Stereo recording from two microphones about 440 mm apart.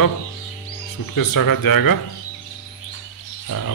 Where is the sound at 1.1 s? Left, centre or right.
Left.